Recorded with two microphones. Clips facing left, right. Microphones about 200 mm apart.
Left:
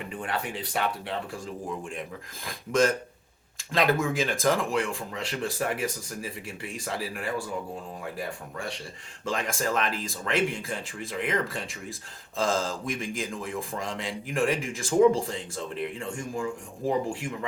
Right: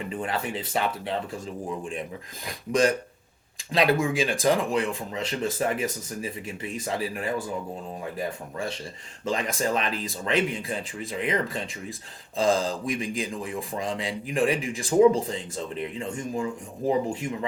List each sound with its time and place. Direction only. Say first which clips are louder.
0.1 s speech: right 2 dB; 25° right (ahead or behind)
2.5 s speech: right 1 dB; 15° right (ahead or behind)
9.2 s speech: right 2 dB; 20° right (ahead or behind)